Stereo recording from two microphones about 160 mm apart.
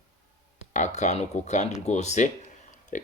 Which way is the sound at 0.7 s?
45° left (ahead or behind).